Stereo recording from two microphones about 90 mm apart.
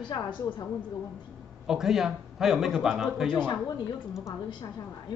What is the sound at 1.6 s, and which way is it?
A man's voice, 5° right (ahead or behind).